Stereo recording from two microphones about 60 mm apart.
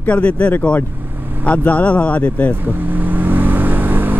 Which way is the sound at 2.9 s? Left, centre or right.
Right.